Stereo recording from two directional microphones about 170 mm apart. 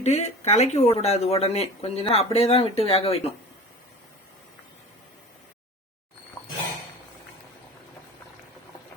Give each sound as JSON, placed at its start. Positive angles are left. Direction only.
{"t": 0.0, "sound": "speech", "side_deg": 40}